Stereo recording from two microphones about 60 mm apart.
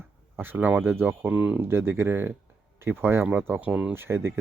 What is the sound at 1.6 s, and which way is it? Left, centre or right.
Speech, right.